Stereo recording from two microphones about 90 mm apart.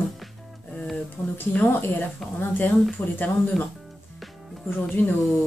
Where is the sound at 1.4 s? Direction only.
20° left (ahead or behind).